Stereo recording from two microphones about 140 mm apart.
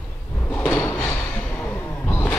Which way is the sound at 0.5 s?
15° left (ahead or behind).